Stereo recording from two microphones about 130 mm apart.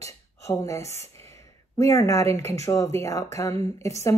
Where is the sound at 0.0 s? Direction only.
25° left (ahead or behind).